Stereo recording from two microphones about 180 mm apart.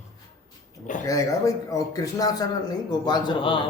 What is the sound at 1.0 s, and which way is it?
A man's voice, 20° left (ahead or behind).